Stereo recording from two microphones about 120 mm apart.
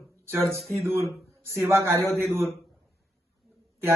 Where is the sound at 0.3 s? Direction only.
20° right (ahead or behind).